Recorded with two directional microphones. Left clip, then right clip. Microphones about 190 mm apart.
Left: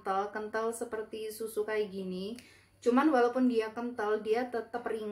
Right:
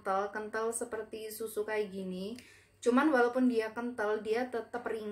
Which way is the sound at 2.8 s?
15° right (ahead or behind).